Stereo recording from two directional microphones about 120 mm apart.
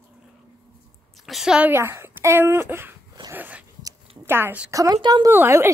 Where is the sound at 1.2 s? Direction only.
5° right (ahead or behind).